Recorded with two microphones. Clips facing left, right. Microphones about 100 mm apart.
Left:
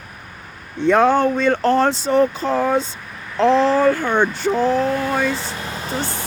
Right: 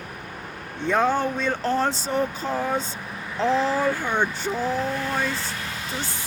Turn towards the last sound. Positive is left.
turn(degrees=65)  # may be behind; listen again after turning